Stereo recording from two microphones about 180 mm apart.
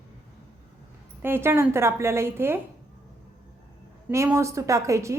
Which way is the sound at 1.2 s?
15° right (ahead or behind).